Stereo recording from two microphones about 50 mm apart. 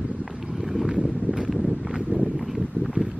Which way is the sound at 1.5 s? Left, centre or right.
Centre.